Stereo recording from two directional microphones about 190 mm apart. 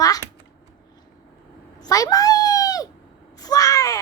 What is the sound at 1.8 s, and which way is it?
Cat, 20° left (ahead or behind).